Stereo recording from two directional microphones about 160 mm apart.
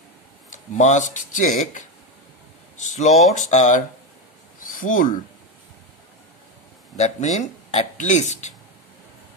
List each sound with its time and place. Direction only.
0.5 s speech: 50° left (ahead or behind)
6.9 s speech: 45° left (ahead or behind)